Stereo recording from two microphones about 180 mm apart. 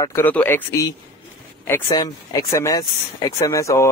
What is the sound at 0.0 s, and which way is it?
Speech, 10° left (ahead or behind).